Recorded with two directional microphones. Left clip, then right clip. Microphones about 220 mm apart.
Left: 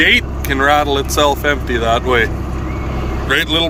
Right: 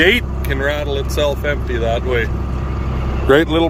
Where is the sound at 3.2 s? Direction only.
25° right (ahead or behind).